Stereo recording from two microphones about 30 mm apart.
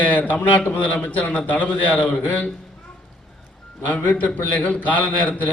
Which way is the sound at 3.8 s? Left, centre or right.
Left.